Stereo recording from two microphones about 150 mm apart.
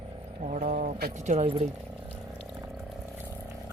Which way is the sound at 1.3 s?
45° right (ahead or behind).